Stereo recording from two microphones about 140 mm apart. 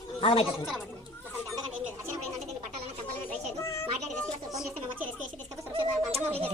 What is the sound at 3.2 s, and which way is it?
Music, 20° left (ahead or behind).